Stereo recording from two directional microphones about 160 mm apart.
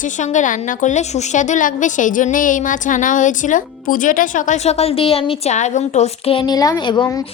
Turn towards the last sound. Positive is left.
turn(degrees=30)  # may be behind; listen again after turning